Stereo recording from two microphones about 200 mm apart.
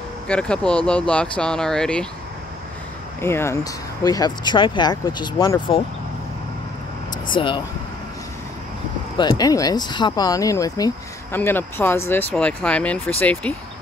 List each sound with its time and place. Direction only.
0.3 s speech: 5° left (ahead or behind)
3.2 s speech: 10° left (ahead or behind)
7.2 s speech: 25° left (ahead or behind)
9.2 s speech: 20° left (ahead or behind)